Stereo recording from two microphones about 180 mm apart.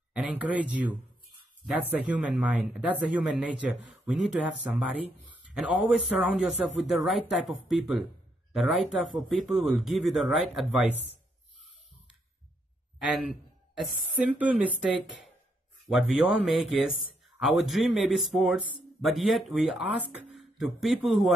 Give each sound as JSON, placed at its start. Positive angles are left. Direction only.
{"t": 0.1, "sound": "speech", "side_deg": -10}
{"t": 13.0, "sound": "a sound", "side_deg": 0}
{"t": 14.4, "sound": "speech", "side_deg": -5}